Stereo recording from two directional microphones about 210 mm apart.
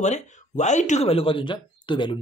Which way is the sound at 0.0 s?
35° left (ahead or behind).